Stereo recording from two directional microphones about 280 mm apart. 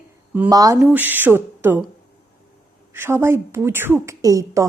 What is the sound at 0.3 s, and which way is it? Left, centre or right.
A woman's voice, centre.